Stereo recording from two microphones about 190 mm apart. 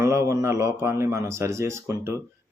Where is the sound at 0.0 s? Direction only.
15° right (ahead or behind).